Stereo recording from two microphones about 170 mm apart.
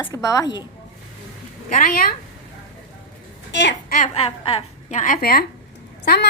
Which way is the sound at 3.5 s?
90° left.